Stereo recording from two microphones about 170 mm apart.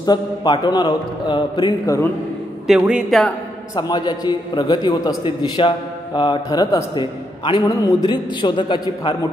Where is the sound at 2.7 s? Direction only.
5° right (ahead or behind).